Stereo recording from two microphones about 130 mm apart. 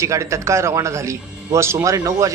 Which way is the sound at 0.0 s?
20° right (ahead or behind).